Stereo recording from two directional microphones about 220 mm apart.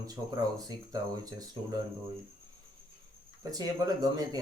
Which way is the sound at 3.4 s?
15° right (ahead or behind).